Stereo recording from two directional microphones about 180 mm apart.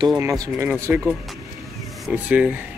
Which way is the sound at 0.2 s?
15° right (ahead or behind).